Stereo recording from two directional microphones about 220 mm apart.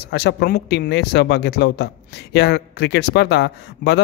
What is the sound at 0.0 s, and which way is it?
Speech, 50° left (ahead or behind).